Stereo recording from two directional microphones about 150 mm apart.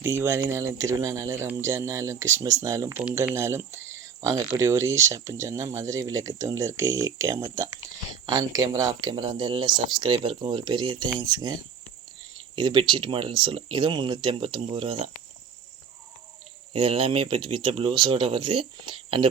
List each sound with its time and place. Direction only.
0.0 s speech: 15° right (ahead or behind)
12.5 s speech: 30° right (ahead or behind)
16.7 s speech: 35° right (ahead or behind)